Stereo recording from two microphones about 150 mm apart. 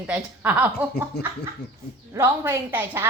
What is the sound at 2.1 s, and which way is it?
Speech, 15° right (ahead or behind).